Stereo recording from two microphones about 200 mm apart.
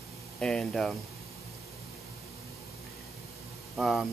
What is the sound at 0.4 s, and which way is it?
Speech, 5° left (ahead or behind).